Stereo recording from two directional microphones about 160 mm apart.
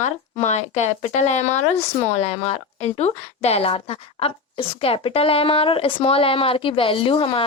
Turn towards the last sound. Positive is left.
turn(degrees=35)  # may be behind; listen again after turning